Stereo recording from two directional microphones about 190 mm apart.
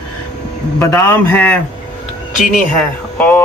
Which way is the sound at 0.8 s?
15° left (ahead or behind).